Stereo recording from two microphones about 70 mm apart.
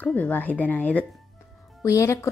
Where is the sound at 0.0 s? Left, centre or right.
Left.